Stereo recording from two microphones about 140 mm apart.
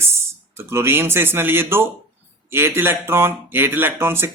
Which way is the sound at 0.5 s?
15° right (ahead or behind).